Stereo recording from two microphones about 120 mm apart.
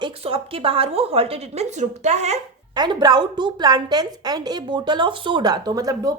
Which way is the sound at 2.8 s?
35° right (ahead or behind).